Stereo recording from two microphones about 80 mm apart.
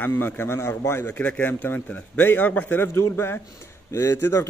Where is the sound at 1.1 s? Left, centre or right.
Centre.